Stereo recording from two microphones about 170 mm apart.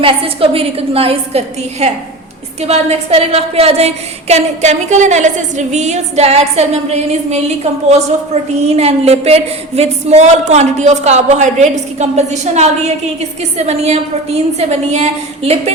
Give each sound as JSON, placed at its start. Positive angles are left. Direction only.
{"t": 0.0, "sound": "a woman's voice", "side_deg": -35}